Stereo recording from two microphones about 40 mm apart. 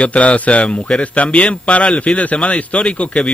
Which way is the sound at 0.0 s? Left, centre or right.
Left.